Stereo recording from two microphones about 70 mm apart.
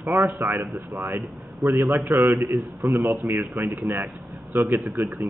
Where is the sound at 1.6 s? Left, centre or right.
Centre.